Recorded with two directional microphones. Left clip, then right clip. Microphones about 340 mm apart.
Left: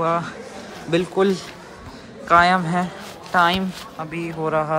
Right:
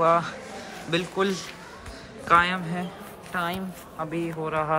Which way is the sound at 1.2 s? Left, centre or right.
Centre.